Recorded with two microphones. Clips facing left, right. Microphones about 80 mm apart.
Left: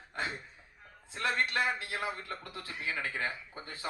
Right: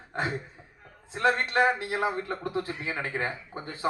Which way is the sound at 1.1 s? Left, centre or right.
Right.